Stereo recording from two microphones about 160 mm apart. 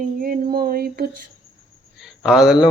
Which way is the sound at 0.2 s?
65° right (ahead or behind).